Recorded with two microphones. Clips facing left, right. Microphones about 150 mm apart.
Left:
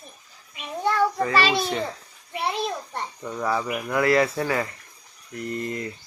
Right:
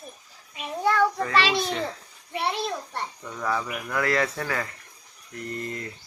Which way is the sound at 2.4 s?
15° left (ahead or behind).